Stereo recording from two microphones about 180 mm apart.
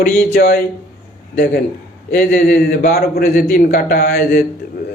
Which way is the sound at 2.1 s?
60° left (ahead or behind).